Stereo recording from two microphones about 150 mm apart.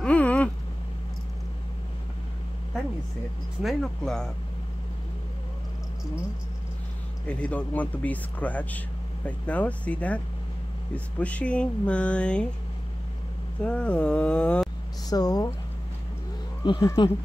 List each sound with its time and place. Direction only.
0.0 s a sound: 10° left (ahead or behind)
3.6 s speech: centre (ahead or behind)
7.2 s speech: 10° left (ahead or behind)
13.6 s speech: 10° left (ahead or behind)
15.0 s speech: 25° left (ahead or behind)
16.6 s speech: 30° left (ahead or behind)